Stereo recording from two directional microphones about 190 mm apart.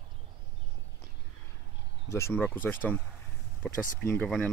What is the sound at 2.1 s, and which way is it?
Speech, 15° left (ahead or behind).